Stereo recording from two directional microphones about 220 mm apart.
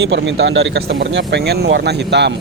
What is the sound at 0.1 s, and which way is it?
Speech, 50° right (ahead or behind).